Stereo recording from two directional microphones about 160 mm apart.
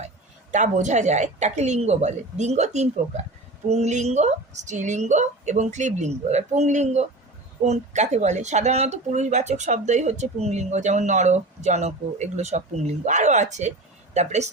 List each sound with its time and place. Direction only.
0.5 s speech: 50° right (ahead or behind)